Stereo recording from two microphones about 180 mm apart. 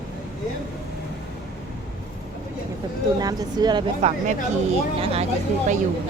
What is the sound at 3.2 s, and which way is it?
Speech, 20° right (ahead or behind).